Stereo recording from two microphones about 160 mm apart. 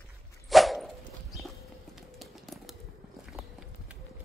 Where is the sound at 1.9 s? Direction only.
Centre (ahead or behind).